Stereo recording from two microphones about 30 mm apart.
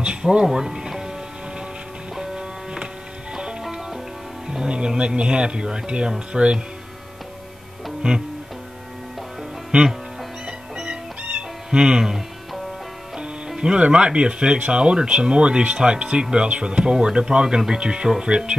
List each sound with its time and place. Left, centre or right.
0.0 s music: right
2.1 s music: right
4.5 s speech: right
8.0 s music: right
10.9 s cat: right
13.6 s speech: right